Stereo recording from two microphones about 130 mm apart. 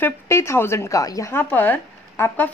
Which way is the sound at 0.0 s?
20° left (ahead or behind).